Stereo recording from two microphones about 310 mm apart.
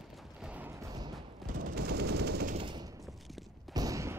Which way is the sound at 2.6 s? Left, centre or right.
Centre.